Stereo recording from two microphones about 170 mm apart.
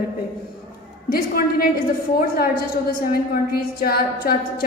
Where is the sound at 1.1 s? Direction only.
60° left (ahead or behind).